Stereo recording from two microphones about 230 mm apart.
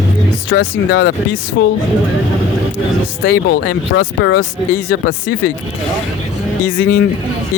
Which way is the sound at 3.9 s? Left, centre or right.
Left.